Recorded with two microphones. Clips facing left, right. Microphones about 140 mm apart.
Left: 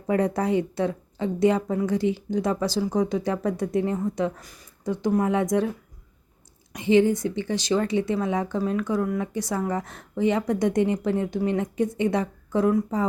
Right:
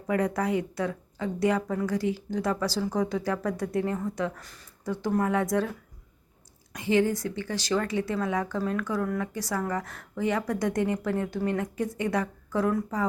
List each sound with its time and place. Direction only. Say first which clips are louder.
0.1 s speech: left 4 dB; 30° left (ahead or behind)
6.7 s speech: left 5 dB; 20° left (ahead or behind)